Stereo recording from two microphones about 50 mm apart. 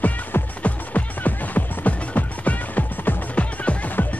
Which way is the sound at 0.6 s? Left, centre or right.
Left.